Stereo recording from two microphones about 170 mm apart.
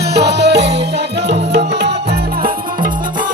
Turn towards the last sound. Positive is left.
turn(degrees=-55)  # may be behind; listen again after turning